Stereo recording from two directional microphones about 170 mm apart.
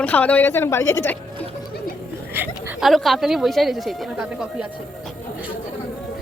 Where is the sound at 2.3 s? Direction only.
5° right (ahead or behind).